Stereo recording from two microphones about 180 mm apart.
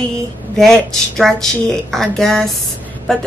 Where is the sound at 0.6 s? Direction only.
Centre (ahead or behind).